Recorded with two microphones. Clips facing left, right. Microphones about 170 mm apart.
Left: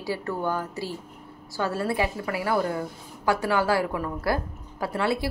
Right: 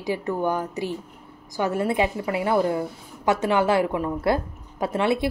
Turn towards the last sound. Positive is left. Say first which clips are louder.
# right 3 dB
turn(degrees=-20)  # may be behind; listen again after turning